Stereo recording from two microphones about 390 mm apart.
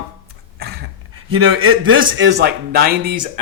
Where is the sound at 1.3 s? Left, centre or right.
Right.